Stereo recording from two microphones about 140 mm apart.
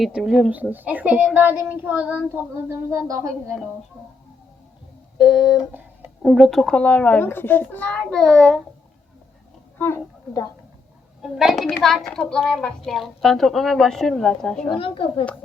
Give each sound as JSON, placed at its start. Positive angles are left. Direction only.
{"t": 0.0, "sound": "speech", "side_deg": 0}
{"t": 5.1, "sound": "a child's voice", "side_deg": 35}
{"t": 5.7, "sound": "a sound", "side_deg": -10}
{"t": 6.4, "sound": "a child's voice", "side_deg": 5}
{"t": 9.7, "sound": "speech", "side_deg": 15}
{"t": 11.2, "sound": "a woman's voice", "side_deg": 0}
{"t": 14.7, "sound": "a child's voice", "side_deg": 40}